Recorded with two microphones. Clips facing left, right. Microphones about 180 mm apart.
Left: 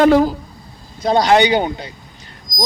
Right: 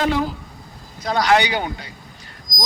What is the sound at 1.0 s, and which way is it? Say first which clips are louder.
Speech: left 5 dB; 25° left (ahead or behind).